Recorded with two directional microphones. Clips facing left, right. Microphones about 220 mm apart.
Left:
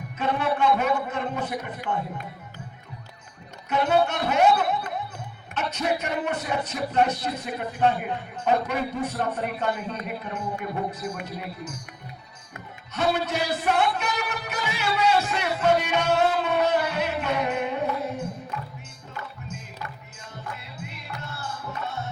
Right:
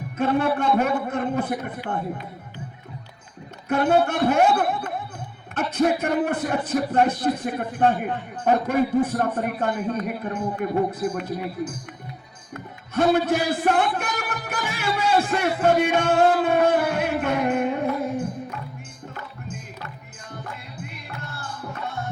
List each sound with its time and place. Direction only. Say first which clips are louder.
0.2 s a man's voice: right 3 dB; 50° right (ahead or behind)
3.7 s a man's voice: right 3 dB; 50° right (ahead or behind)
12.9 s a man's voice: right 6 dB; 50° right (ahead or behind)